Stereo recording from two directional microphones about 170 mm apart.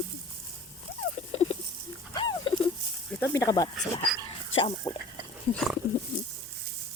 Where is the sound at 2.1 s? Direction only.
25° left (ahead or behind).